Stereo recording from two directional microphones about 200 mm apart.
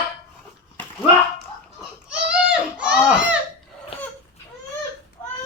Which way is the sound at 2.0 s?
5° right (ahead or behind).